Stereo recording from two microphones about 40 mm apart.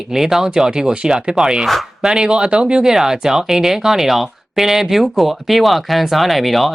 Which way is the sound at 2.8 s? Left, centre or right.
Centre.